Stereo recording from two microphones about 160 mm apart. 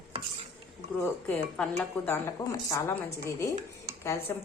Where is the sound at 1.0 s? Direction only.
10° left (ahead or behind).